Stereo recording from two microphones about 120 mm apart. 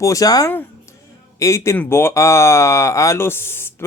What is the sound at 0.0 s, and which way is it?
Speech, 30° left (ahead or behind).